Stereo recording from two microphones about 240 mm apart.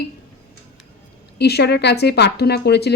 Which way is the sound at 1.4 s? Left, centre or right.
Left.